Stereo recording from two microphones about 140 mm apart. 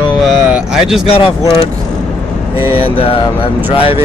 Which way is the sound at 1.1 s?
40° left (ahead or behind).